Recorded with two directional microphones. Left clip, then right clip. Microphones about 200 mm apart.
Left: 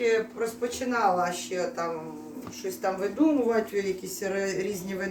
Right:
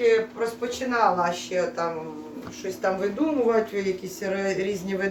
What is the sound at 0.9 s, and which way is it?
Speech, centre (ahead or behind).